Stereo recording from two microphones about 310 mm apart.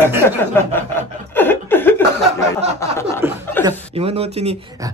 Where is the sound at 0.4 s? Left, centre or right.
Centre.